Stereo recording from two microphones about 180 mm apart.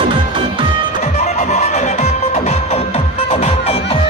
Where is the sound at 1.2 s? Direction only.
40° left (ahead or behind).